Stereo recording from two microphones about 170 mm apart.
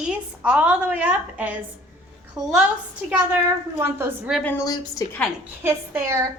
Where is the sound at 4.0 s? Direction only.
5° right (ahead or behind).